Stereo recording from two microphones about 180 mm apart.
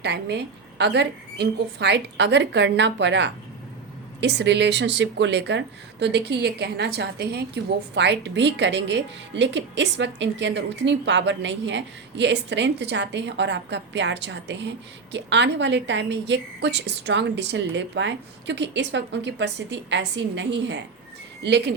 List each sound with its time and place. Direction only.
0.0 s speech: 65° right (ahead or behind); by 3.3 s 85° right
4.2 s speech: 70° right (ahead or behind)
21.4 s speech: 70° right (ahead or behind)